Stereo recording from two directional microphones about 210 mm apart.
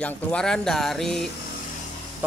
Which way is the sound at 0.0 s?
5° left (ahead or behind).